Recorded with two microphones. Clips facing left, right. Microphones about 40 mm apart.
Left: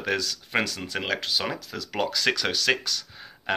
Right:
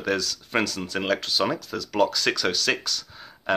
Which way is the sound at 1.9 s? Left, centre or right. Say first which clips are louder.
Right 3 dB; centre.